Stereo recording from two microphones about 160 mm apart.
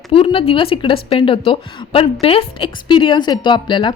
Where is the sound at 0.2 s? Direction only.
35° left (ahead or behind).